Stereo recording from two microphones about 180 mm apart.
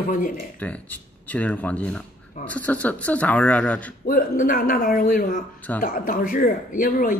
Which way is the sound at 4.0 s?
50° left (ahead or behind).